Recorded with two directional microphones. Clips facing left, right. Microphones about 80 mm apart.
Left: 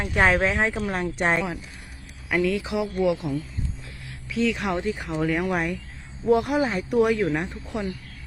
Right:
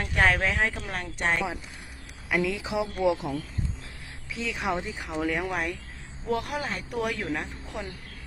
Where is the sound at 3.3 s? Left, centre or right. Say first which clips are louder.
Left 3 dB; right.